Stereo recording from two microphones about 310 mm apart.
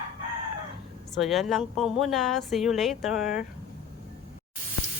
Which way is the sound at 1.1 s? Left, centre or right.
Centre.